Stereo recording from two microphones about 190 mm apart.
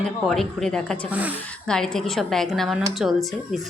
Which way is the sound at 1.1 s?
10° right (ahead or behind).